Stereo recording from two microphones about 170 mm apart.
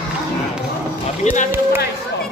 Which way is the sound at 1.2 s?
45° left (ahead or behind).